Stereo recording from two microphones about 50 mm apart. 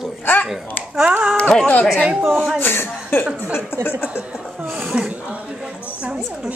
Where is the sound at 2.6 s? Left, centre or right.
Left.